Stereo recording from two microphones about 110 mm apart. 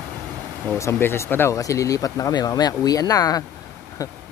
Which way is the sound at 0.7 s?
25° left (ahead or behind).